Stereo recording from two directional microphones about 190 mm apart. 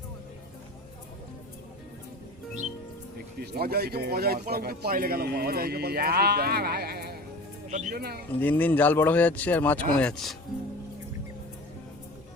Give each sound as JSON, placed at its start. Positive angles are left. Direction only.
{"t": 3.4, "sound": "speech", "side_deg": -55}
{"t": 7.7, "sound": "speech", "side_deg": -40}
{"t": 7.9, "sound": "speech", "side_deg": -55}
{"t": 8.4, "sound": "speech", "side_deg": 10}